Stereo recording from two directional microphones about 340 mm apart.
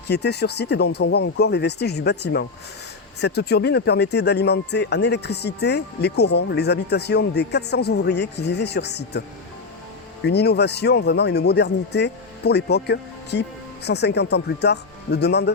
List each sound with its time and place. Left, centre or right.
0.1 s speech: left
10.2 s speech: left